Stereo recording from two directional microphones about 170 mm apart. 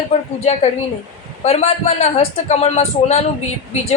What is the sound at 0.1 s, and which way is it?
Speech, 35° left (ahead or behind).